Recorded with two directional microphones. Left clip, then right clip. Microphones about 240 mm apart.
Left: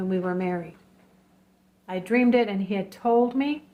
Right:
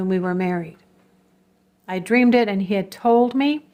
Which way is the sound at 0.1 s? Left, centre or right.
Right.